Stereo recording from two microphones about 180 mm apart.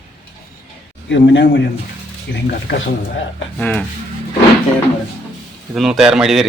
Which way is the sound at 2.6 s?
90° left.